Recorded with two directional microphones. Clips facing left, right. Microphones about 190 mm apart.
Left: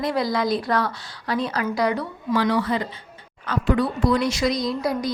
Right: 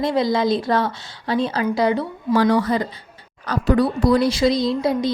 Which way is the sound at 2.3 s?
45° right (ahead or behind).